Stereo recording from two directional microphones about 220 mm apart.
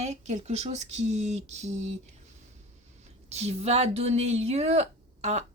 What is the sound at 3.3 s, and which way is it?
Speech, 30° right (ahead or behind).